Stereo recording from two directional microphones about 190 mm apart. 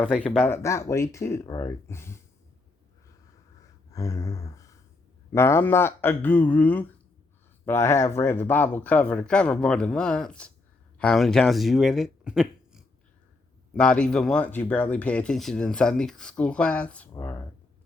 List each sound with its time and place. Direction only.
0.0 s speech: 5° left (ahead or behind)
3.9 s a sound: 15° left (ahead or behind)
5.3 s speech: 15° left (ahead or behind)